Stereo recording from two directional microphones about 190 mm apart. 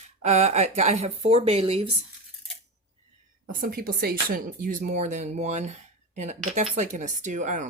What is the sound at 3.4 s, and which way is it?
A woman's voice, 50° right (ahead or behind).